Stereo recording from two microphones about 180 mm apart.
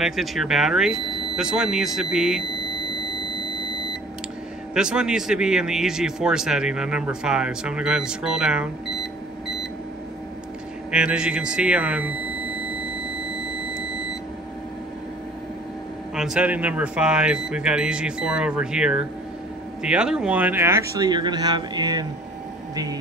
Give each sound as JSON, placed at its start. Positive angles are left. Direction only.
{"t": 0.0, "sound": "a man's voice", "side_deg": 0}
{"t": 4.7, "sound": "a man's voice", "side_deg": -5}
{"t": 10.9, "sound": "a man's voice", "side_deg": -5}
{"t": 16.2, "sound": "a man's voice", "side_deg": -5}